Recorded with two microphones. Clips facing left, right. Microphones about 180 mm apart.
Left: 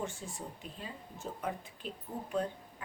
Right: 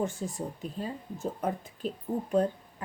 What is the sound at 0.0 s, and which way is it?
Speech, 40° right (ahead or behind).